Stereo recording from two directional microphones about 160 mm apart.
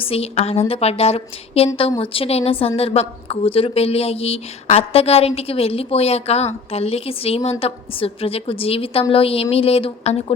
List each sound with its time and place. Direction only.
0.0 s a woman's voice: 40° left (ahead or behind)